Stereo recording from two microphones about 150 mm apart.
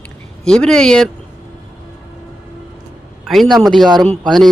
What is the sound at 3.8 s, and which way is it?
Speech, 30° right (ahead or behind).